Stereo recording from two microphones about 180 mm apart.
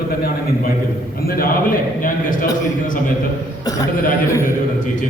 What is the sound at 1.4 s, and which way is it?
A man's voice, 50° left (ahead or behind).